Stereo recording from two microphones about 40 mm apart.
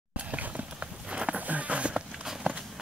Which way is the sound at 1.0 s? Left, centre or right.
Right.